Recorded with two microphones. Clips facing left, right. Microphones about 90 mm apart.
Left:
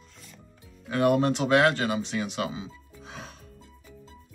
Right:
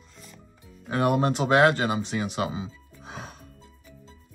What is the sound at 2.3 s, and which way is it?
Speech, 45° right (ahead or behind).